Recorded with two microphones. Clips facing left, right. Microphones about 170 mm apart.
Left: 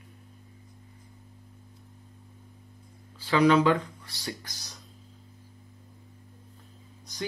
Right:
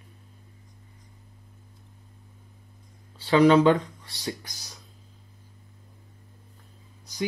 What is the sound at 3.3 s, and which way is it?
Speech, 30° right (ahead or behind).